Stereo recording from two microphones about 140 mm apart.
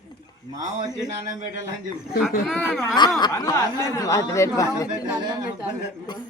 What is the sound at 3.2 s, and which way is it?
Speech, 25° left (ahead or behind).